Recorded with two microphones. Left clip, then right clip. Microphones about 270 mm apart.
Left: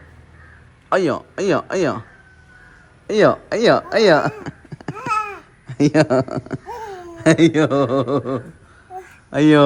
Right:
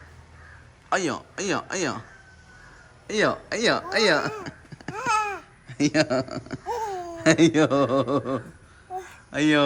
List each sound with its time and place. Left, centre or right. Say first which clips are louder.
0.9 s speech: left 7 dB; centre
3.1 s speech: left 9 dB; centre
4.4 s babbling: left 5 dB; centre
5.3 s speech: even; centre
6.7 s a sound: right 2 dB; centre
7.2 s a man's voice: left 5 dB; centre